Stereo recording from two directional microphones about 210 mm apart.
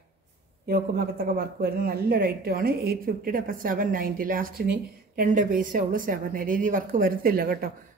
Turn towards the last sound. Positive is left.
turn(degrees=-45)  # may be behind; listen again after turning